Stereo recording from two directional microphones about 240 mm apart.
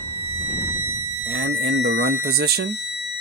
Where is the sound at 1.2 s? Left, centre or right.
Right.